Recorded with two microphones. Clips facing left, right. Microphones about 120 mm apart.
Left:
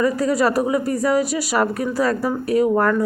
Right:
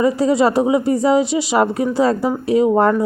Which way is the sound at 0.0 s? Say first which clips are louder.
Right 3 dB; 25° right (ahead or behind).